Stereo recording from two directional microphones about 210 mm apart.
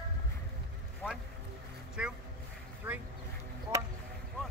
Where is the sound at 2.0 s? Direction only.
5° right (ahead or behind).